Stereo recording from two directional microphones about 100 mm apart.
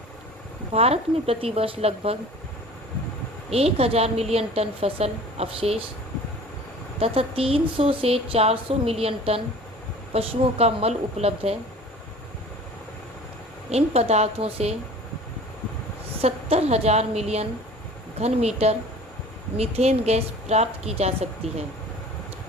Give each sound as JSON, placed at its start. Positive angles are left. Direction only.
{"t": 0.7, "sound": "a woman's voice", "side_deg": -85}
{"t": 3.5, "sound": "a woman's voice", "side_deg": -80}
{"t": 7.0, "sound": "a woman's voice", "side_deg": -75}
{"t": 13.7, "sound": "a woman's voice", "side_deg": -90}
{"t": 16.2, "sound": "a woman's voice", "side_deg": -90}